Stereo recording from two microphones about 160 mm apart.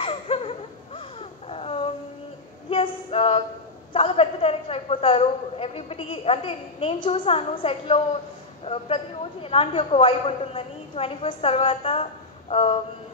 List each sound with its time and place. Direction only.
0.0 s laughter: 35° left (ahead or behind)
1.5 s a sound: 35° left (ahead or behind)
3.9 s a woman's voice: 35° left (ahead or behind)